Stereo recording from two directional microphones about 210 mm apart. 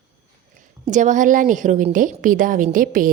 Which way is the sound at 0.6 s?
35° right (ahead or behind).